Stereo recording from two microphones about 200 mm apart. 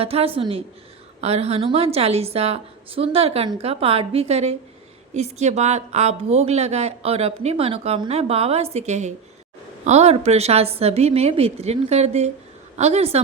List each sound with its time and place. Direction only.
0.0 s a woman's voice: 30° right (ahead or behind)